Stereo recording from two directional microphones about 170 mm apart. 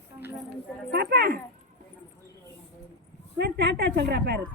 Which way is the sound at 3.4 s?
80° right.